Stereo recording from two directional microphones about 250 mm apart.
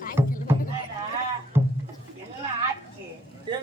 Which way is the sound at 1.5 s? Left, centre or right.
Centre.